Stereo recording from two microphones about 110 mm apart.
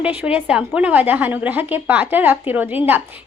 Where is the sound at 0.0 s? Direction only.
15° right (ahead or behind).